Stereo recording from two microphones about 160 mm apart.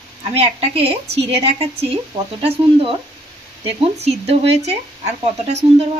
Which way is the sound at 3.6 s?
40° right (ahead or behind).